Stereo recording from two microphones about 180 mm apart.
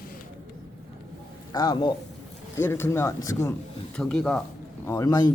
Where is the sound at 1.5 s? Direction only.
20° left (ahead or behind).